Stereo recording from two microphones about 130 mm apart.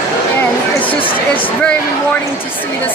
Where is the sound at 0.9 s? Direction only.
45° left (ahead or behind).